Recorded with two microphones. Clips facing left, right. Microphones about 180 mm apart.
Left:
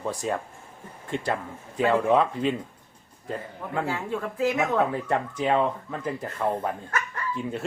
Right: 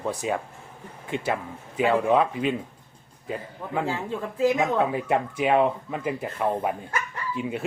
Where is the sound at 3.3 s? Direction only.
15° right (ahead or behind).